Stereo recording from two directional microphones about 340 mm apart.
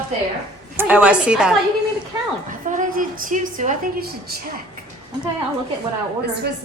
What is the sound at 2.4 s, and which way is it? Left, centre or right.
A woman's voice, right.